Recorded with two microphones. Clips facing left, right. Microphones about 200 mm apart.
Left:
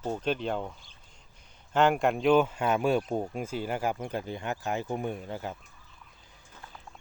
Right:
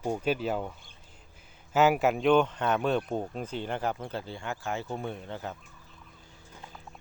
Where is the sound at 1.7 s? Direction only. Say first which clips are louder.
Right 1 dB; 5° right (ahead or behind); by 5.6 s 10° left (ahead or behind).